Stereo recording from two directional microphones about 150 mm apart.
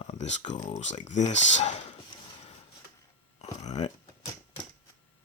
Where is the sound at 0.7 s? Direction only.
55° left (ahead or behind).